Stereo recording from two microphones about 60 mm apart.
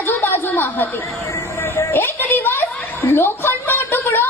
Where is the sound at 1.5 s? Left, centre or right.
Left.